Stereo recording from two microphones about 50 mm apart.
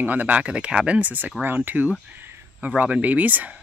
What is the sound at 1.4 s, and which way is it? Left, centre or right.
Speech, right.